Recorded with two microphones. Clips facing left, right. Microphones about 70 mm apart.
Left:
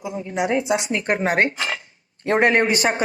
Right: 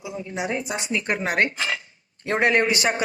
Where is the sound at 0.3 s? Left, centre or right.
Left.